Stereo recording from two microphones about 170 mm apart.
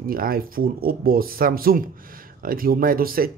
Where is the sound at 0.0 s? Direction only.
60° right (ahead or behind).